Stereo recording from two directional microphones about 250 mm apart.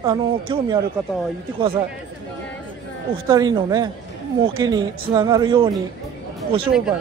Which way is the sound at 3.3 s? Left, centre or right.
Centre.